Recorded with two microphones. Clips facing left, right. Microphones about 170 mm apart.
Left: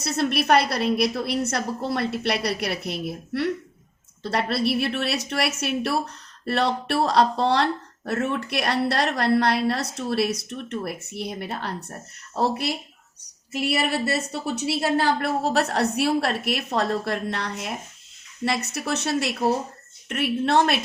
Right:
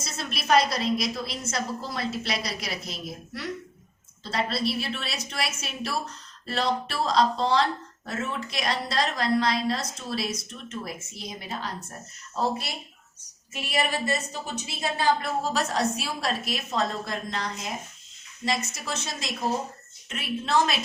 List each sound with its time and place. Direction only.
0.0 s a woman's voice: 65° left (ahead or behind)